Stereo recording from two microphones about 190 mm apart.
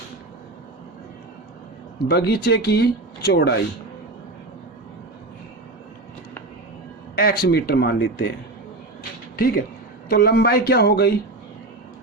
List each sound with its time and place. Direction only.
2.0 s speech: 55° left (ahead or behind)
7.2 s speech: 55° left (ahead or behind)
9.3 s speech: 50° left (ahead or behind)